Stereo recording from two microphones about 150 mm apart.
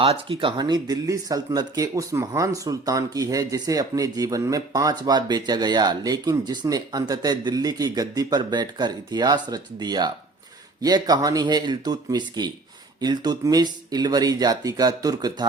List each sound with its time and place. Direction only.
0.0 s speech: 40° right (ahead or behind)